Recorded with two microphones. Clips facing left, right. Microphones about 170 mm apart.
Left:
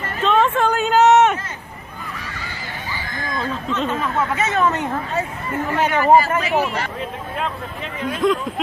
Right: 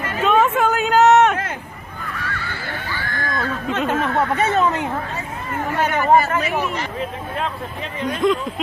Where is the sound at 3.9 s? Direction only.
70° right (ahead or behind).